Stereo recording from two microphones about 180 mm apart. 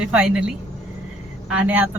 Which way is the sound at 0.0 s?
5° right (ahead or behind).